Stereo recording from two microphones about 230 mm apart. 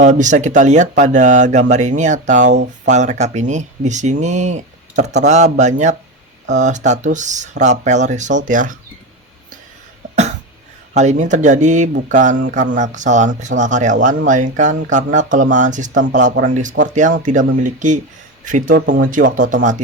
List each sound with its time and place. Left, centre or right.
0.0 s speech: right
10.9 s speech: right